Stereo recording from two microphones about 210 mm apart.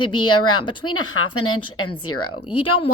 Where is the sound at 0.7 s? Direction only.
90° left.